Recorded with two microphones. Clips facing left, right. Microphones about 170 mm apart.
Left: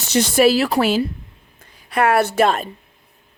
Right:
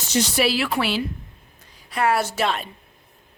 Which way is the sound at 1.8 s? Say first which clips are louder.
Left 5 dB; 60° left (ahead or behind).